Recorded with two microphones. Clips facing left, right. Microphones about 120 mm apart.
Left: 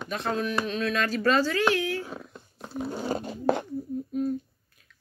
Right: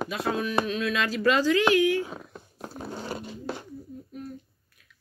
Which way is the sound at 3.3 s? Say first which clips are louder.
Left 10 dB; 55° left (ahead or behind).